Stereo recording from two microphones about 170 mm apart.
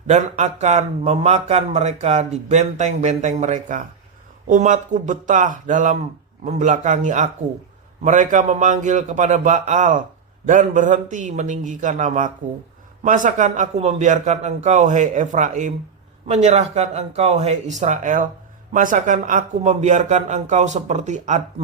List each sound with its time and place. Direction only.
0.1 s a man's voice: 45° right (ahead or behind)